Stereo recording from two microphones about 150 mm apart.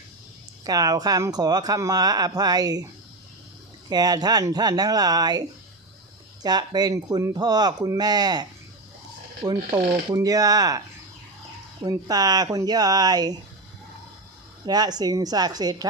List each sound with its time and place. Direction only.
0.6 s speech: 25° right (ahead or behind)
3.8 s speech: 25° right (ahead or behind)
6.4 s speech: 25° right (ahead or behind)
14.7 s speech: 25° right (ahead or behind)